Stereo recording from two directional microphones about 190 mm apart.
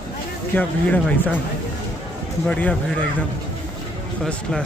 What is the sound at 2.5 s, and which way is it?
Speech, 5° left (ahead or behind).